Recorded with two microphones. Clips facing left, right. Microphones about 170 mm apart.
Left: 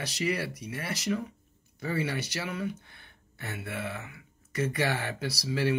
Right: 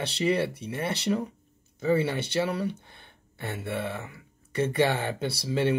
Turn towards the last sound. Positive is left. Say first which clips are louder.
# right 3 dB
turn(degrees=-25)  # may be behind; listen again after turning